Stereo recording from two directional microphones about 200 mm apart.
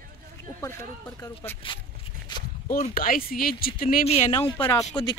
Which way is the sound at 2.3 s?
20° left (ahead or behind).